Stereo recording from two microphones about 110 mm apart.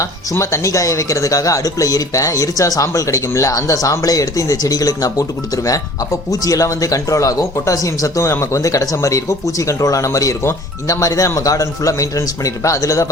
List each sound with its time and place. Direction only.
0.0 s speech: 25° left (ahead or behind)
6.4 s speech: 30° left (ahead or behind)